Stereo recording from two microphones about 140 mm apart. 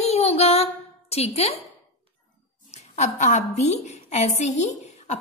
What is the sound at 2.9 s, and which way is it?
A woman's voice, 55° left (ahead or behind).